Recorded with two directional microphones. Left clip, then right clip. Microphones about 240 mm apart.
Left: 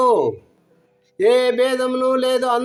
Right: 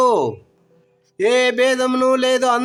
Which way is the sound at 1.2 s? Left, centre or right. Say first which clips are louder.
Even; right.